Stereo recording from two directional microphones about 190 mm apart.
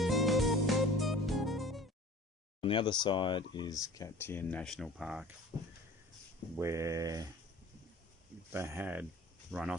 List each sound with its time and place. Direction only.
0.0 s music: centre (ahead or behind)
2.6 s speech: 25° left (ahead or behind); by 7.2 s 20° right (ahead or behind)
8.5 s speech: 10° right (ahead or behind)